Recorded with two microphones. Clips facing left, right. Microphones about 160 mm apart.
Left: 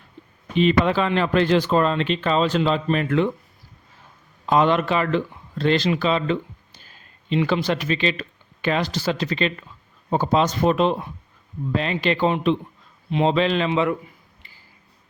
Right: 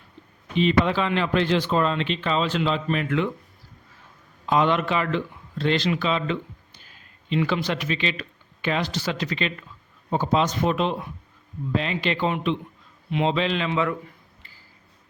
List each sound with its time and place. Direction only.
0.6 s speech: 50° left (ahead or behind); by 3.3 s 35° left (ahead or behind)
4.4 s speech: 40° left (ahead or behind)
7.4 s a man's voice: 35° left (ahead or behind)
13.3 s speech: 45° left (ahead or behind)
13.7 s a man's voice: 20° left (ahead or behind)